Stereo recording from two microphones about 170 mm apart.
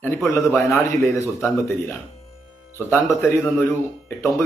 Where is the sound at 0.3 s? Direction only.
15° left (ahead or behind).